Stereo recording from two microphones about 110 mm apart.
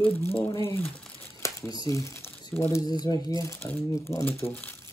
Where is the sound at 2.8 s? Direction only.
40° left (ahead or behind).